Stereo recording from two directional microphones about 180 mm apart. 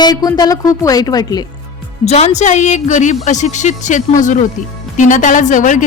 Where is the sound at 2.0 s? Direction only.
35° left (ahead or behind).